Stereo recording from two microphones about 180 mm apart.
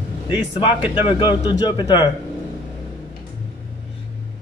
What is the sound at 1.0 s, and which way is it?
Speech, 30° left (ahead or behind).